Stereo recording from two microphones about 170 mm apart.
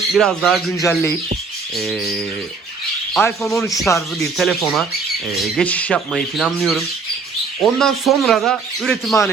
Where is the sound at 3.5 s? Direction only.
15° left (ahead or behind).